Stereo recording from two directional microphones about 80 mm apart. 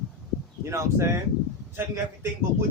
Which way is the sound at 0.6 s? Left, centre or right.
Right.